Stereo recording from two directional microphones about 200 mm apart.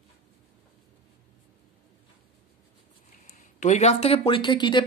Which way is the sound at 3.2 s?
35° left (ahead or behind).